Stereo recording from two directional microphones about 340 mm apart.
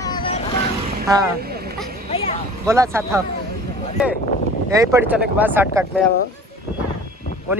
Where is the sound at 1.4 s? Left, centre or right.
Right.